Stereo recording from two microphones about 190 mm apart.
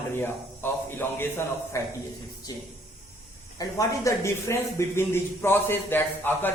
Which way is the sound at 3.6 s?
15° left (ahead or behind).